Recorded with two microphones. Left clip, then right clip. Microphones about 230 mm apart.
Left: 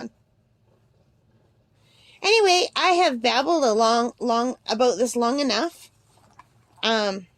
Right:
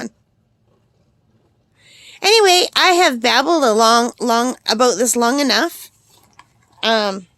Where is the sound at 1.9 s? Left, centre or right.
Right.